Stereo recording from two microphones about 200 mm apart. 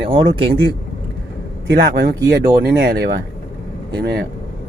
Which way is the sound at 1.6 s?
55° right (ahead or behind).